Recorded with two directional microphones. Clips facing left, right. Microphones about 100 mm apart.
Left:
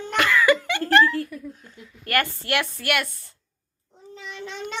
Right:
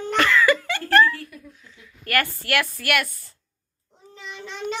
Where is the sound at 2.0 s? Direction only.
20° left (ahead or behind).